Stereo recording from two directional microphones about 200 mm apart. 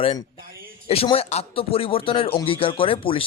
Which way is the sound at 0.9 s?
30° left (ahead or behind).